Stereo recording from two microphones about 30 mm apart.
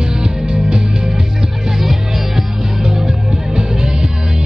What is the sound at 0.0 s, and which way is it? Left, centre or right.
Music, right.